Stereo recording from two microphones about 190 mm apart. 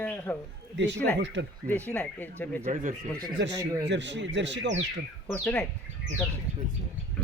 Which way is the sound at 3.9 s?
70° right (ahead or behind).